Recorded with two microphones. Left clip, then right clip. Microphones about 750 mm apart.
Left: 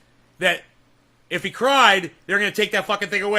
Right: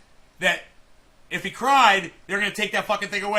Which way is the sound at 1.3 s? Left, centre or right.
Left.